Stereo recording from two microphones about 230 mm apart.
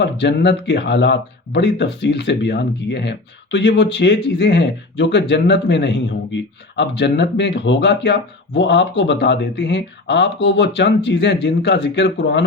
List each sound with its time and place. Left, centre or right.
0.0 s speech: left